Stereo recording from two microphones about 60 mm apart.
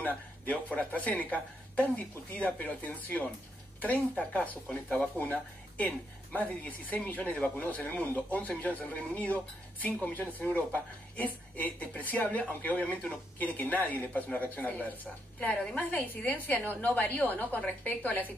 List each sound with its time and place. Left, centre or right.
0.0 s a woman's voice: left